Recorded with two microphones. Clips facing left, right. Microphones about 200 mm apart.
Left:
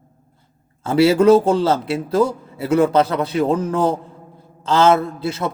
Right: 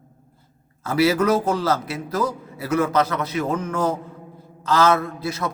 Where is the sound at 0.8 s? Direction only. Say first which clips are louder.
Left 5 dB; 30° left (ahead or behind).